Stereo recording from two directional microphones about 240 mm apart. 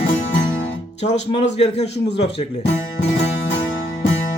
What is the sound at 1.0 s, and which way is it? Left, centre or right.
Speech, left.